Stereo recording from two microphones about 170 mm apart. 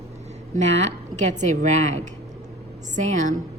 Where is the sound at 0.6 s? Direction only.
40° right (ahead or behind).